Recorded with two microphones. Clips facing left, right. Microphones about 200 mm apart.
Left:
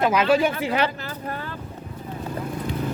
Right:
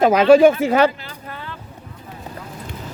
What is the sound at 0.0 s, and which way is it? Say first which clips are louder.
Speech: right 9 dB; 45° right (ahead or behind).